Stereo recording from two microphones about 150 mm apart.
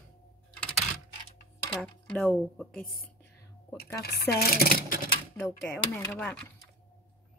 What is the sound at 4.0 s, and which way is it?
Speech, 90° left.